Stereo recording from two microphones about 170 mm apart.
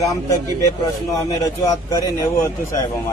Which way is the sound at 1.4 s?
20° left (ahead or behind).